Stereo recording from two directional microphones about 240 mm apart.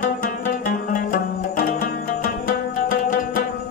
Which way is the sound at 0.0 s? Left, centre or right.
Left.